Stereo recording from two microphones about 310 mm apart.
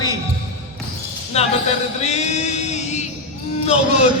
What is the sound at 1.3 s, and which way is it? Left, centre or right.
Speech, centre.